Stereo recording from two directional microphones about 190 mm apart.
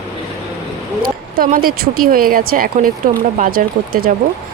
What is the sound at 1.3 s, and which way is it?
Speech, 50° right (ahead or behind).